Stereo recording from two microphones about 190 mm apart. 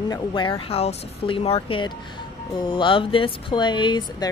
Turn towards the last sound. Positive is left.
turn(degrees=25)  # may be behind; listen again after turning